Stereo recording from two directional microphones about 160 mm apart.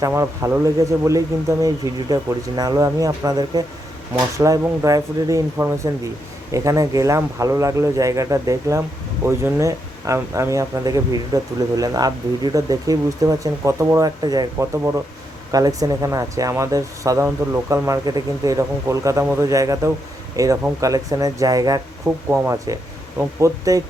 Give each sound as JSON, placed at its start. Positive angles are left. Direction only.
{"t": 0.0, "sound": "speech", "side_deg": -20}